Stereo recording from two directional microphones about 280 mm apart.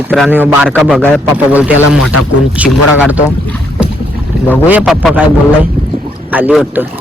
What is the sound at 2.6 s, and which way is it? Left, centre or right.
Speech, centre.